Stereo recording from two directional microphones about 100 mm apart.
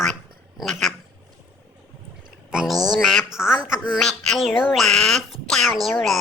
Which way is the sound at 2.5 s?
5° right (ahead or behind).